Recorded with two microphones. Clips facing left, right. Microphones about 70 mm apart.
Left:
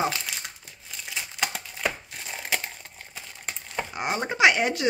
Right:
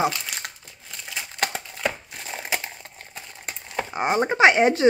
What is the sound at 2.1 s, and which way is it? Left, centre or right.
Crushing, centre.